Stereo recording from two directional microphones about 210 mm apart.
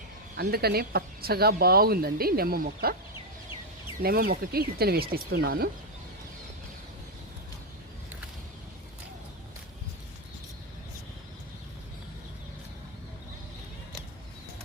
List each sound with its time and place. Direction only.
0.5 s speech: 50° right (ahead or behind)
4.0 s speech: 45° right (ahead or behind)